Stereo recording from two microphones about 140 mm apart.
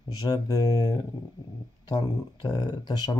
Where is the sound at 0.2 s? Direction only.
25° left (ahead or behind).